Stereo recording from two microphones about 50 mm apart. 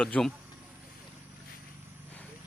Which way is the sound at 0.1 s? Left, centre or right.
Centre.